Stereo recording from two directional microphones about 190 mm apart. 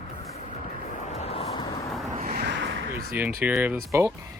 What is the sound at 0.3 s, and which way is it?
Vehicle, 35° left (ahead or behind).